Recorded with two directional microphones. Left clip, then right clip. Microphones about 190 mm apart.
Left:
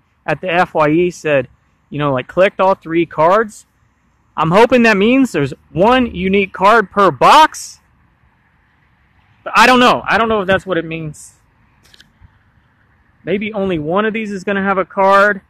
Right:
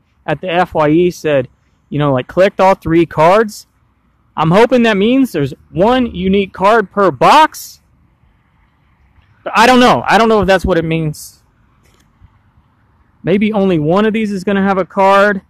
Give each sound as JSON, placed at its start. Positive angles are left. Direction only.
{"t": 0.2, "sound": "speech", "side_deg": -10}
{"t": 3.2, "sound": "speech", "side_deg": -5}
{"t": 4.3, "sound": "a sound", "side_deg": -10}
{"t": 4.6, "sound": "speech", "side_deg": -5}
{"t": 9.4, "sound": "speech", "side_deg": -10}
{"t": 13.2, "sound": "speech", "side_deg": -25}